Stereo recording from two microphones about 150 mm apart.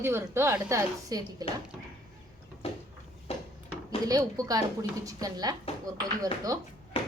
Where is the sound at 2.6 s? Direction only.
45° left (ahead or behind).